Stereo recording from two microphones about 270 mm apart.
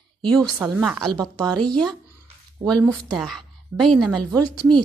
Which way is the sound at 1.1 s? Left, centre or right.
Centre.